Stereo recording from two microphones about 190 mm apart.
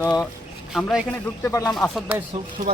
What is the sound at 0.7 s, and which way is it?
Speech, centre (ahead or behind).